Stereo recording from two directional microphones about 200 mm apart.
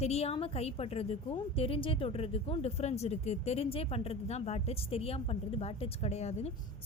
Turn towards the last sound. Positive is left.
turn(degrees=35)  # may be behind; listen again after turning